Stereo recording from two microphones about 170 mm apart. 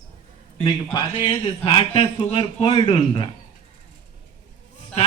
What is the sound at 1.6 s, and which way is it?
A man's voice, 35° left (ahead or behind).